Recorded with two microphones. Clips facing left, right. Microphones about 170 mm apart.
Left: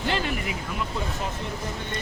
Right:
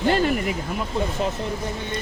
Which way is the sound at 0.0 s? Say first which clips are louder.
Right 7 dB; 45° right (ahead or behind).